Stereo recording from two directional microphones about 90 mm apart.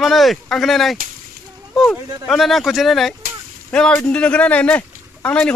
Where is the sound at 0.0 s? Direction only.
Centre (ahead or behind).